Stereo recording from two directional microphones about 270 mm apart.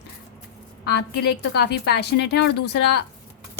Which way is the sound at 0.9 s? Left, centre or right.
Left.